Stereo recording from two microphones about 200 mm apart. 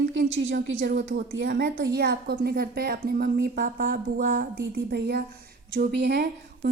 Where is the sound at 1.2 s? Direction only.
50° right (ahead or behind).